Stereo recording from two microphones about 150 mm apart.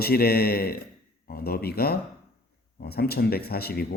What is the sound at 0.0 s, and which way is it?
Speech, 90° left.